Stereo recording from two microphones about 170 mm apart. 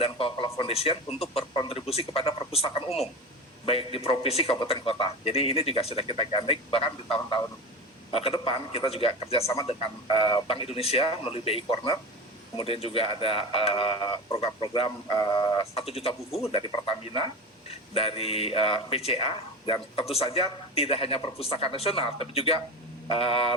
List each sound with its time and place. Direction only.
0.0 s speech: 30° left (ahead or behind)
0.7 s speech: 35° left (ahead or behind)